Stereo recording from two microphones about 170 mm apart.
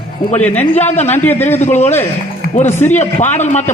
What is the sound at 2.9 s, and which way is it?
Speech, 40° left (ahead or behind).